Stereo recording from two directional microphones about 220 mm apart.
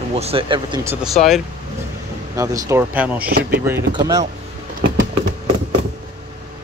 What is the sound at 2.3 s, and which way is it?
Speech, 15° right (ahead or behind).